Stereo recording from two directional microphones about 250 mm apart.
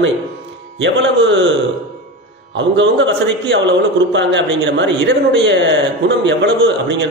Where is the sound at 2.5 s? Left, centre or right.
Right.